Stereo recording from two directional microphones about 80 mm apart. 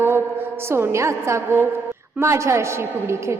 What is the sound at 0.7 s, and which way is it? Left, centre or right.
Music, right.